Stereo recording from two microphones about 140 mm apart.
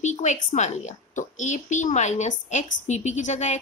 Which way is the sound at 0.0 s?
60° left (ahead or behind).